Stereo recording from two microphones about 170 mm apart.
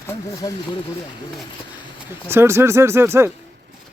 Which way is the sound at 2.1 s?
15° right (ahead or behind).